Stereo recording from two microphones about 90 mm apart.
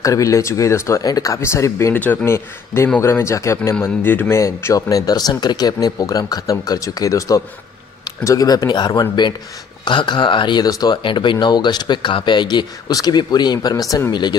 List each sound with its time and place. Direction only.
0.0 s speech: 35° left (ahead or behind)
11.0 s speech: 65° left (ahead or behind); by 14.0 s 45° left (ahead or behind)